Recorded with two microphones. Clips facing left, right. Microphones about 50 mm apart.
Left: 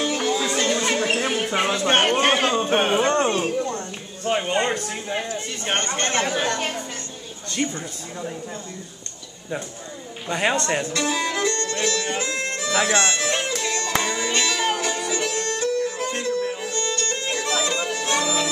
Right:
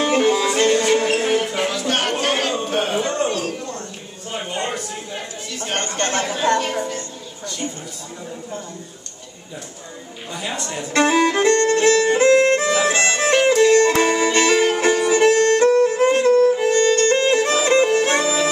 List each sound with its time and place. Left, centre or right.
0.0 s music: right
1.5 s a sound: left
4.3 s a sound: left
10.3 s speech: left
10.9 s violin: right
12.7 s speech: left
13.0 s music: right